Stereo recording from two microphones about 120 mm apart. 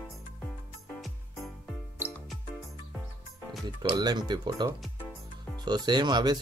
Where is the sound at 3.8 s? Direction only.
35° right (ahead or behind).